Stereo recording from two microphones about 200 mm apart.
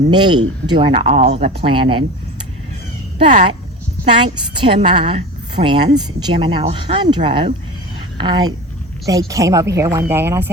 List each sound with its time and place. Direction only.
0.1 s speech: 20° right (ahead or behind)
3.2 s speech: 35° right (ahead or behind)
4.2 s speech: 25° right (ahead or behind)